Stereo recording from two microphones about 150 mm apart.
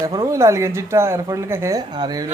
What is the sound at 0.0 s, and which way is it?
Speech, 25° right (ahead or behind).